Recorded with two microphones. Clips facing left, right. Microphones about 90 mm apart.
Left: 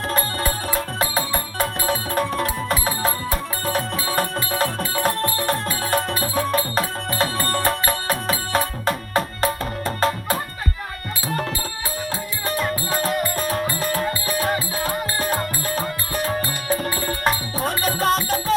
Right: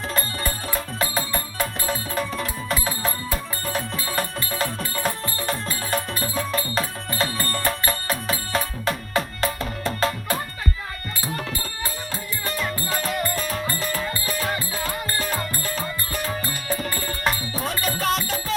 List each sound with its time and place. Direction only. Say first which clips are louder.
0.4 s music: left 4 dB; 50° left (ahead or behind)
4.9 s music: left 6 dB; 60° left (ahead or behind); by 10.2 s 40° left (ahead or behind)
12.5 s music: left 4 dB; 45° left (ahead or behind)